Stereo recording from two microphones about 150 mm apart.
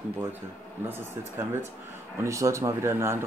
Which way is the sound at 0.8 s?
15° right (ahead or behind).